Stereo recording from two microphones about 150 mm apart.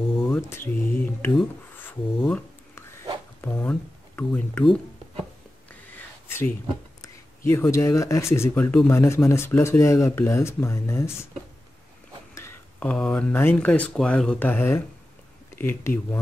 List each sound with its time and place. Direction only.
0.3 s speech: 15° left (ahead or behind)
1.8 s a sound: 10° left (ahead or behind)
3.3 s speech: 15° left (ahead or behind)
5.7 s a sound: 10° left (ahead or behind)
7.0 s speech: 15° left (ahead or behind)
12.4 s speech: 15° left (ahead or behind)